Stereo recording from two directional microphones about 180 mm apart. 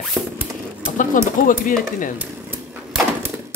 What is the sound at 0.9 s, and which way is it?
Speech, 45° left (ahead or behind).